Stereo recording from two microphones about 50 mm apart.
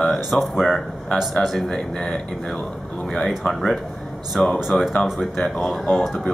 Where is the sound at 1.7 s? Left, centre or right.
Centre.